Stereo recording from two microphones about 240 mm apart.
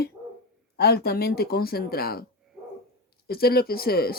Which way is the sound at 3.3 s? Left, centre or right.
Left.